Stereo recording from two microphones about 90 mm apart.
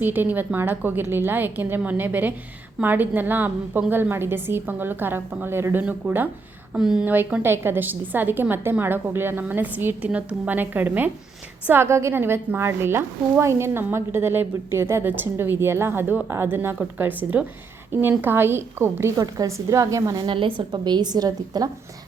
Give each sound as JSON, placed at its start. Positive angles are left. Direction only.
{"t": 0.0, "sound": "a woman's voice", "side_deg": -20}
{"t": 6.7, "sound": "speech", "side_deg": -5}
{"t": 7.0, "sound": "a woman's voice", "side_deg": -20}
{"t": 19.2, "sound": "a woman's voice", "side_deg": -40}
{"t": 20.1, "sound": "a woman's voice", "side_deg": -70}
{"t": 20.6, "sound": "a woman's voice", "side_deg": -55}